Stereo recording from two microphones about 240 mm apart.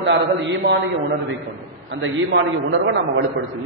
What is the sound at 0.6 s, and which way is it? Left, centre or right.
Speech, right.